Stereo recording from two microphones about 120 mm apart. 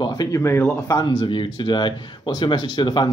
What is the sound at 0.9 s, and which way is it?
Speech, 35° left (ahead or behind).